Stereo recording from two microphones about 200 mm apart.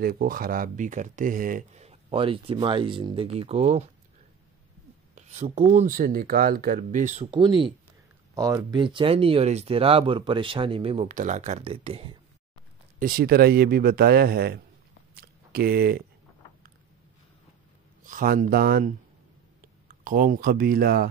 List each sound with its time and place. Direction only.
0.0 s speech: 45° right (ahead or behind)
5.1 s speech: 30° right (ahead or behind)
7.2 s speech: 25° right (ahead or behind)
13.0 s speech: 50° right (ahead or behind)
15.1 s a sound: 50° right (ahead or behind)
18.0 s speech: 45° right (ahead or behind)
19.9 s speech: 45° right (ahead or behind)